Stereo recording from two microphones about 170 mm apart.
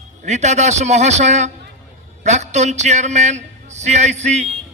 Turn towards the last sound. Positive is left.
turn(degrees=-40)  # may be behind; listen again after turning